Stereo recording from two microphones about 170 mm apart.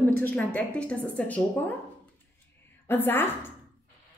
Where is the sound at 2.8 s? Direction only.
10° left (ahead or behind).